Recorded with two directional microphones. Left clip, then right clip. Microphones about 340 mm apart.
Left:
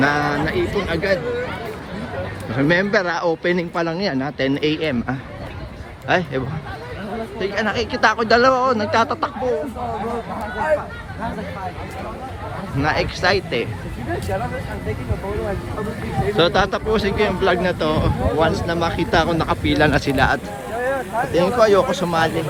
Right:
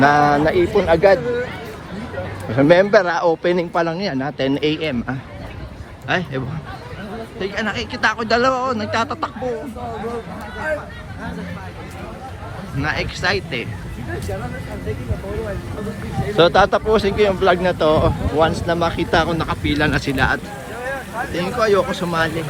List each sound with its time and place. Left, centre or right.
0.0 s speech: centre
2.6 s speech: centre
12.8 s speech: centre
16.3 s speech: centre